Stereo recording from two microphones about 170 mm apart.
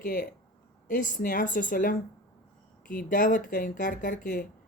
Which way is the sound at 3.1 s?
55° left (ahead or behind).